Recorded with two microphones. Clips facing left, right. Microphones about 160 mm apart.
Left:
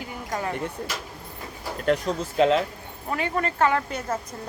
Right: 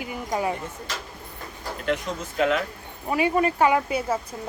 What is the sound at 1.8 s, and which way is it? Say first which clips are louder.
Speech: left 4 dB; 40° left (ahead or behind).